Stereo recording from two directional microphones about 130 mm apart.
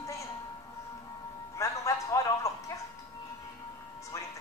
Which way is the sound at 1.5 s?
25° left (ahead or behind).